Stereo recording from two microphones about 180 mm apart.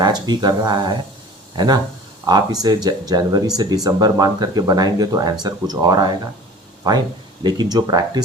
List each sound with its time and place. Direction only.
0.0 s speech: 25° right (ahead or behind)